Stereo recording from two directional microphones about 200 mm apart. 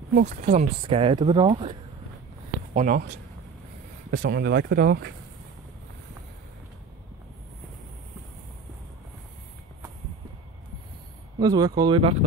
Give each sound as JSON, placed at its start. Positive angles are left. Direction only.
{"t": 0.1, "sound": "speech", "side_deg": -40}
{"t": 2.7, "sound": "speech", "side_deg": -40}
{"t": 4.2, "sound": "speech", "side_deg": -55}
{"t": 11.3, "sound": "speech", "side_deg": -20}